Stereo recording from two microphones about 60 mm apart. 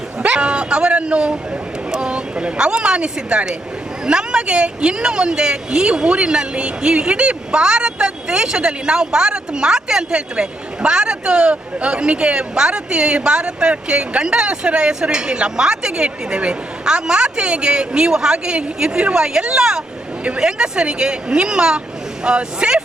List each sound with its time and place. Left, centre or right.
0.2 s dog: centre
1.9 s a woman's voice: centre